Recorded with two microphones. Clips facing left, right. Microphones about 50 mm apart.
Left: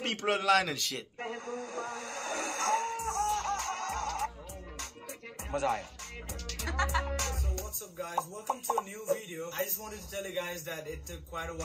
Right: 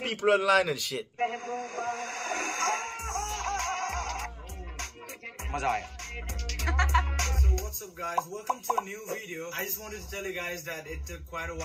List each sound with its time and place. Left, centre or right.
0.0 s a man's voice: centre
1.1 s a sound: right
5.5 s music: right